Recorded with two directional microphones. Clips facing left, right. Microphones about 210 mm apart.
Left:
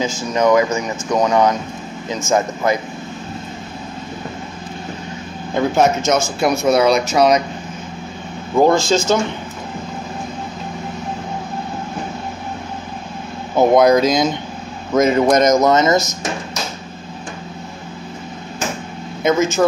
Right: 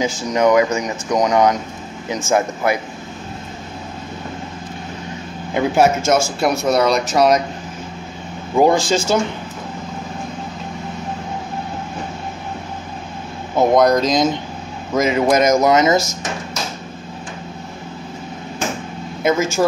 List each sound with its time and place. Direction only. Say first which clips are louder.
0.0 s speech: right 1 dB; 15° right (ahead or behind)
5.5 s speech: even; 10° right (ahead or behind)
8.5 s speech: left 1 dB; 15° right (ahead or behind)
13.6 s speech: left 2 dB; 5° left (ahead or behind); by 16.0 s 15° right (ahead or behind)